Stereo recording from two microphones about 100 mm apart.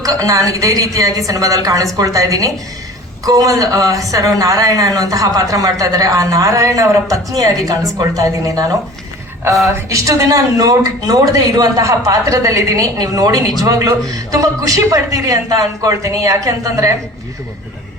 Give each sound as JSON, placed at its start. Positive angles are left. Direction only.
{"t": 0.0, "sound": "speech", "side_deg": -35}